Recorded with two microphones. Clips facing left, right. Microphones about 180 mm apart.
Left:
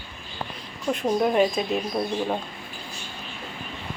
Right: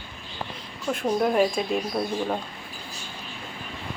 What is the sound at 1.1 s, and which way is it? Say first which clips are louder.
Speech: left 1 dB; 5° left (ahead or behind).